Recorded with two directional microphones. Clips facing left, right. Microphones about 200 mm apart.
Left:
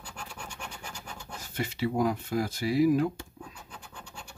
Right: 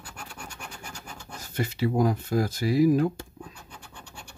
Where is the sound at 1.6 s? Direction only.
40° right (ahead or behind).